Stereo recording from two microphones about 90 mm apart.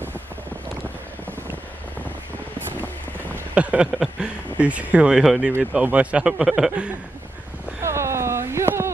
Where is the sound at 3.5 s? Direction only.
15° right (ahead or behind).